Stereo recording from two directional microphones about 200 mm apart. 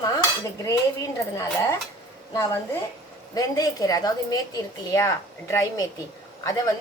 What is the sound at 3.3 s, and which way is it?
A woman's voice, 15° left (ahead or behind).